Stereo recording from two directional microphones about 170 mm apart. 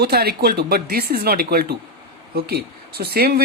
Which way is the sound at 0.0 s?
70° right (ahead or behind).